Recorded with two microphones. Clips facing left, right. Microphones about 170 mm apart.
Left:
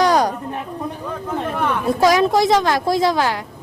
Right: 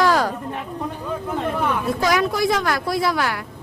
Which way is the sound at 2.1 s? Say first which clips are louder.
Left 5 dB; 25° left (ahead or behind).